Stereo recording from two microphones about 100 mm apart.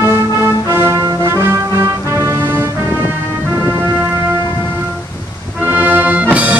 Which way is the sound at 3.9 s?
20° right (ahead or behind).